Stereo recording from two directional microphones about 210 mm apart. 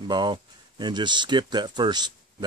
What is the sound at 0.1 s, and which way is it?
Speech, 20° right (ahead or behind).